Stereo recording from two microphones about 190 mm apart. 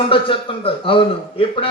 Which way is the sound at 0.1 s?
30° left (ahead or behind).